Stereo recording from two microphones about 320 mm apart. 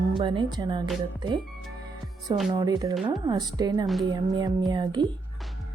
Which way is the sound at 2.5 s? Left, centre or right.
Centre.